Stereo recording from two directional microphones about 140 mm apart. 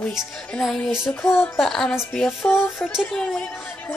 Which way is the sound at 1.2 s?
20° left (ahead or behind).